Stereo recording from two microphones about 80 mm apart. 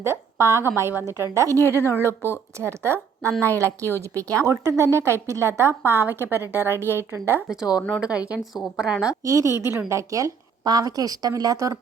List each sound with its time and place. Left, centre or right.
0.0 s a woman's voice: right
1.8 s speech: left
2.6 s a woman's voice: right
3.8 s speech: left
4.2 s a woman's voice: right
7.4 s a woman's voice: centre
9.2 s a woman's voice: right